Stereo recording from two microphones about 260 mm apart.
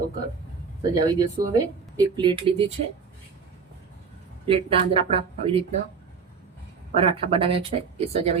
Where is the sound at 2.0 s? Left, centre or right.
Centre.